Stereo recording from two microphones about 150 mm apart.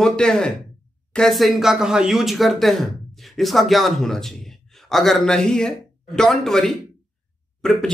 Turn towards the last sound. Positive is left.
turn(degrees=5)  # may be behind; listen again after turning